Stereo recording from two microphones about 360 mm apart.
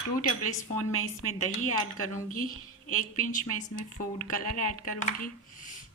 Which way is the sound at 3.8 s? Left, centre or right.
Left.